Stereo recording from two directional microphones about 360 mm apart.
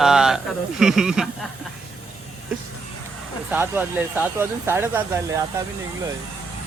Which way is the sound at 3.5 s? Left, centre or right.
Centre.